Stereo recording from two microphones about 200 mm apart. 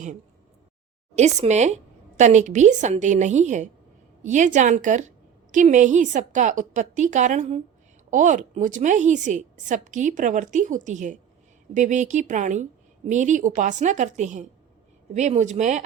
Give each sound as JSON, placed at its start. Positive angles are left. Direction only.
{"t": 1.1, "sound": "a woman's voice", "side_deg": -35}